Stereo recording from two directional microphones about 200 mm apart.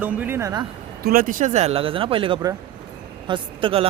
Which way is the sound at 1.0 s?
45° right (ahead or behind).